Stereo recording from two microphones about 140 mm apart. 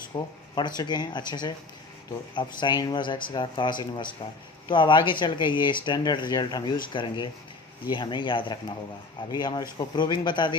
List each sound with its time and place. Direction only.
0.1 s speech: 30° left (ahead or behind)